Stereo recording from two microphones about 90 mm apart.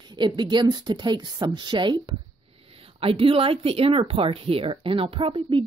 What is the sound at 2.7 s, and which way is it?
A woman's voice, 90° right.